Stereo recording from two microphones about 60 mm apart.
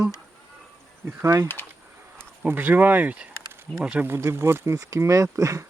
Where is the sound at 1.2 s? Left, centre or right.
Right.